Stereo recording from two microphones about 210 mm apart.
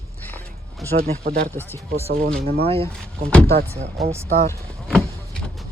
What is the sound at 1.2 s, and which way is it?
Speech, 45° right (ahead or behind).